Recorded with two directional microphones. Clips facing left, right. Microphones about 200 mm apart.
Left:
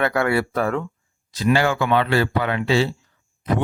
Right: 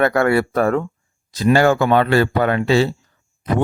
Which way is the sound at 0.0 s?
45° right (ahead or behind).